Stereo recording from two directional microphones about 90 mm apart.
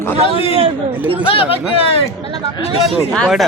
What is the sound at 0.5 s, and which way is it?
Chatter, 90° right.